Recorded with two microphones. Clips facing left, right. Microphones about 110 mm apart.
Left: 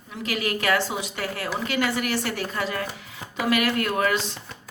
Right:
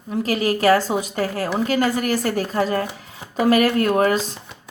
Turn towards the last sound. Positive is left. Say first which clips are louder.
# right 6 dB
turn(degrees=-35)  # may be behind; listen again after turning